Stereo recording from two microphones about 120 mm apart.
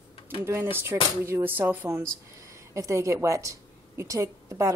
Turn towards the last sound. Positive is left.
turn(degrees=-25)  # may be behind; listen again after turning